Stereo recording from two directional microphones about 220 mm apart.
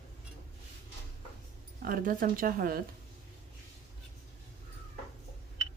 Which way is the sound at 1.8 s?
40° right (ahead or behind).